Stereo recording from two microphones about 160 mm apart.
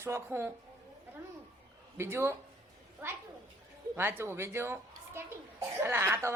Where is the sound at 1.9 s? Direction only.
15° right (ahead or behind).